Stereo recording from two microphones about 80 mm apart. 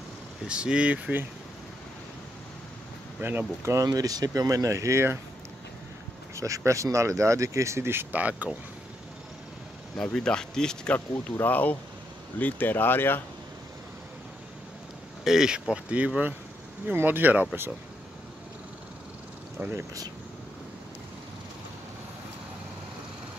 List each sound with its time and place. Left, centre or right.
0.5 s speech: centre
3.2 s speech: right
3.7 s speech: right
6.3 s speech: right; by 8.5 s centre
9.9 s speech: centre
11.4 s speech: left
15.2 s speech: centre
16.8 s speech: right
19.6 s speech: right